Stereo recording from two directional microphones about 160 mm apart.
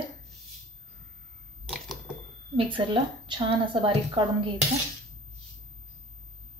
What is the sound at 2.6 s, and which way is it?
A woman's voice, 30° right (ahead or behind).